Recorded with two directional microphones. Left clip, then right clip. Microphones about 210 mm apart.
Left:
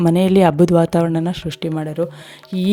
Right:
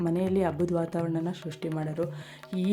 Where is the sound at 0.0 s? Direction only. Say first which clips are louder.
Left 13 dB; 45° left (ahead or behind).